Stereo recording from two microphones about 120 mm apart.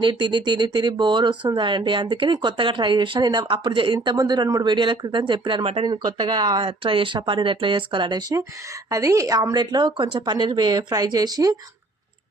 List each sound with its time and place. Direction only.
0.0 s speech: 40° right (ahead or behind)
8.9 s speech: 25° right (ahead or behind)